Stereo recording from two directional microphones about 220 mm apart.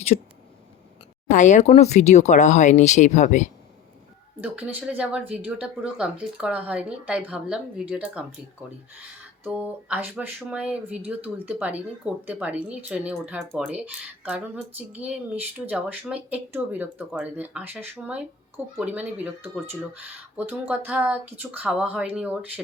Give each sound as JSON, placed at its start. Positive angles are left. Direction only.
{"t": 0.1, "sound": "speech", "side_deg": 30}
{"t": 1.3, "sound": "speech", "side_deg": 35}
{"t": 4.4, "sound": "speech", "side_deg": -5}
{"t": 9.4, "sound": "speech", "side_deg": -10}